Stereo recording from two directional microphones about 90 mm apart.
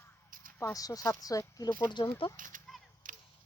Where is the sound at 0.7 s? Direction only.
40° left (ahead or behind).